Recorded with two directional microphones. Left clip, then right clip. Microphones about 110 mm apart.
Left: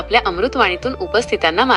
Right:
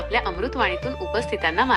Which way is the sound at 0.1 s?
30° left (ahead or behind).